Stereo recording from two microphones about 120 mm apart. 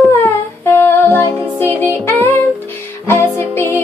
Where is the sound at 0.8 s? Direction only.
20° left (ahead or behind).